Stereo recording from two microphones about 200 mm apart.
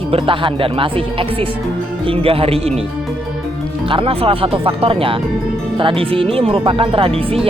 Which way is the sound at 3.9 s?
25° right (ahead or behind).